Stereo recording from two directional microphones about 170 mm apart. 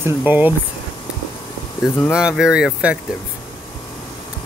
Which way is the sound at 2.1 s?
5° right (ahead or behind).